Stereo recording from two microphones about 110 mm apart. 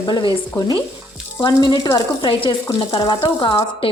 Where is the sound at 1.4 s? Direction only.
30° left (ahead or behind).